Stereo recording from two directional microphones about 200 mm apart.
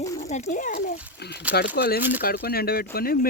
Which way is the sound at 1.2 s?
55° left (ahead or behind).